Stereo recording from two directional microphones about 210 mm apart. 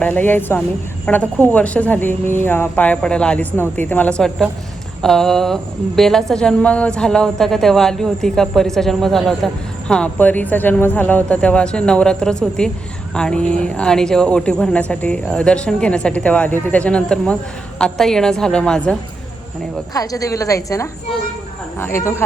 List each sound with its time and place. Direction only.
0.0 s speech: 10° left (ahead or behind)
19.9 s speech: 15° left (ahead or behind)